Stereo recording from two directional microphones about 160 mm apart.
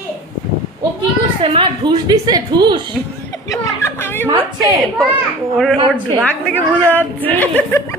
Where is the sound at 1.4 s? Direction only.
35° right (ahead or behind).